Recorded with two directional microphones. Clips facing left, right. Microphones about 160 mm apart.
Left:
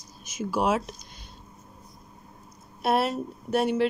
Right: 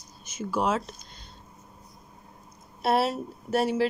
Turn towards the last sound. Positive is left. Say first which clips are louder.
# left 1 dB
turn(degrees=0)  # may be behind; listen again after turning